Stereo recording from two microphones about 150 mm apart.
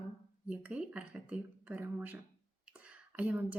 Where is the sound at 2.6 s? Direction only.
10° right (ahead or behind).